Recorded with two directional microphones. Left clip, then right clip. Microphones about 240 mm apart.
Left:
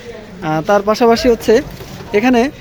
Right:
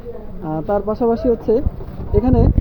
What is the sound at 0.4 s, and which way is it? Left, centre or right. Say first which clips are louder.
Speech: left 7 dB; left.